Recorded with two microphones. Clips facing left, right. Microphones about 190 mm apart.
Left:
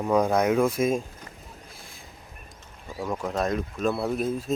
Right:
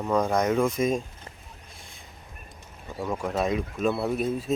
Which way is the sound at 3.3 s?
Centre (ahead or behind).